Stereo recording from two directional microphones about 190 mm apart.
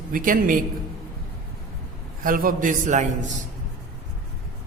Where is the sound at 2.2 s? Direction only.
45° right (ahead or behind).